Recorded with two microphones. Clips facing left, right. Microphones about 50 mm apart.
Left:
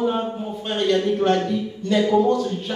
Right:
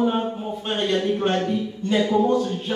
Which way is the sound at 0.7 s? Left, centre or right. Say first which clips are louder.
Left 3 dB; centre.